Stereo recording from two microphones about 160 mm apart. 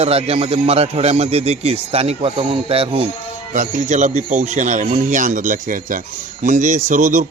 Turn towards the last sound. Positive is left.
turn(degrees=-50)  # may be behind; listen again after turning